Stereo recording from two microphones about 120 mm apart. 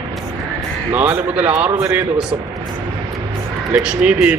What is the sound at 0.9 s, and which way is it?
Speech, 15° right (ahead or behind).